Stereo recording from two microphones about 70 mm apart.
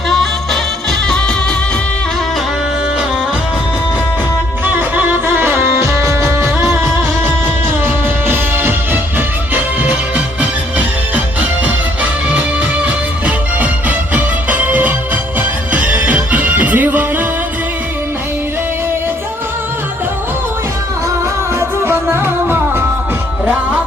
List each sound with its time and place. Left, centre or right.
0.1 s music: centre
4.6 s music: right
10.8 s music: right
12.8 s music: right
21.6 s music: right